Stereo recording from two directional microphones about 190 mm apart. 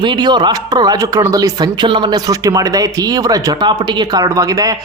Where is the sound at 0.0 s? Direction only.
25° right (ahead or behind).